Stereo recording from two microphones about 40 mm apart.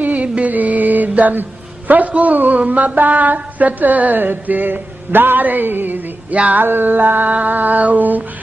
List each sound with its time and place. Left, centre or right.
0.0 s mantra: right
1.9 s speech: right
6.3 s a sound: right
6.6 s speech: right